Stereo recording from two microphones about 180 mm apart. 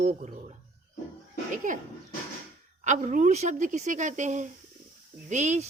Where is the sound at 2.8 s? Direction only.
40° right (ahead or behind).